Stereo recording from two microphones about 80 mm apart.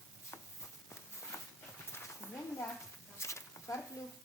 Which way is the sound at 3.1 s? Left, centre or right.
Left.